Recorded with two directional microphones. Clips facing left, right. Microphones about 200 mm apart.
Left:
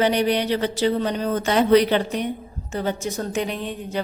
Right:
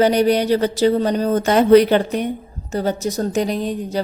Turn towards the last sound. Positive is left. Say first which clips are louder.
# right 5 dB
turn(degrees=-40)  # may be behind; listen again after turning